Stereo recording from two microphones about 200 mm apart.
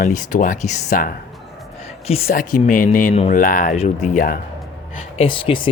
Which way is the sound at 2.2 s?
45° left (ahead or behind).